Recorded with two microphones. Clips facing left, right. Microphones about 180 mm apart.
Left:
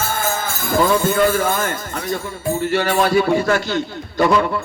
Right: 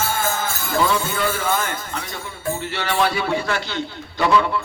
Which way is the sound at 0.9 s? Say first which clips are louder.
Left 7 dB; 50° left (ahead or behind).